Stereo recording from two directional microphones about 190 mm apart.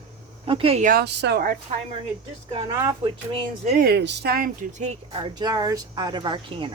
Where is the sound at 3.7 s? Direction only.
55° right (ahead or behind); by 5.2 s 40° right (ahead or behind).